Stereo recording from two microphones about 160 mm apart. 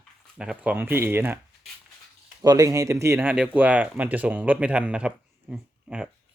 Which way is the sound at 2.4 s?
25° right (ahead or behind).